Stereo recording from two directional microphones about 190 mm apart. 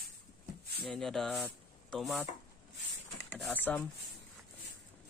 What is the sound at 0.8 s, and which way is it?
Speech, centre (ahead or behind).